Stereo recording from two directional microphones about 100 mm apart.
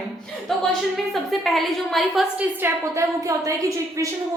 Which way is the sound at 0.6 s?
Centre (ahead or behind).